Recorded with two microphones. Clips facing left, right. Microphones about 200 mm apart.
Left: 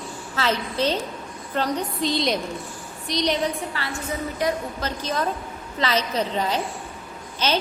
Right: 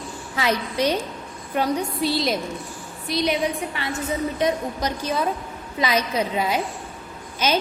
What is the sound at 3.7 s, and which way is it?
A woman's voice, 20° right (ahead or behind).